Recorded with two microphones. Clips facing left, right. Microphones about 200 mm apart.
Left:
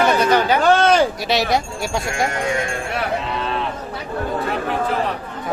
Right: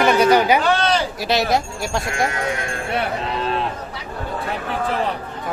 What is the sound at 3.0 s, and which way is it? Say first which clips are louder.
Cattle: even; 40° right (ahead or behind).